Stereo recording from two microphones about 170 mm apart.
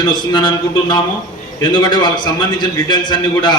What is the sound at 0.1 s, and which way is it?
A man's voice, 25° left (ahead or behind).